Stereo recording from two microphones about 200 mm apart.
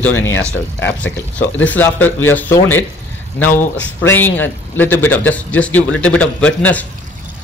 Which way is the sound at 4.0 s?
10° left (ahead or behind).